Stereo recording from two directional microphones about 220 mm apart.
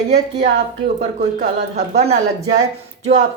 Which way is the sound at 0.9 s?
30° right (ahead or behind).